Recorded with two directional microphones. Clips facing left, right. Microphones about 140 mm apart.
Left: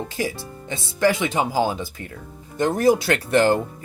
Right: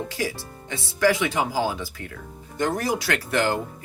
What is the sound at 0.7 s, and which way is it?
Speech, 25° left (ahead or behind).